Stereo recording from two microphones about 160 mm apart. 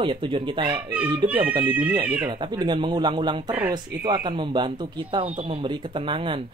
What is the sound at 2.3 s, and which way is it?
Speech, 30° right (ahead or behind).